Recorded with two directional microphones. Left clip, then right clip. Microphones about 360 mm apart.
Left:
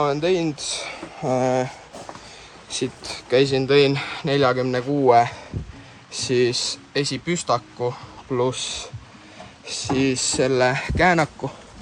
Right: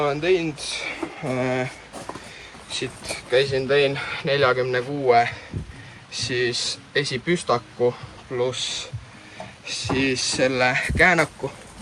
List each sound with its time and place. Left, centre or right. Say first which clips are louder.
0.0 s speech: left 1 dB; centre
2.6 s speech: left 1 dB; centre